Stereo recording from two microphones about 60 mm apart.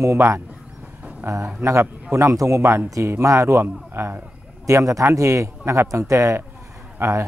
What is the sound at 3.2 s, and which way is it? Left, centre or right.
Speech, right.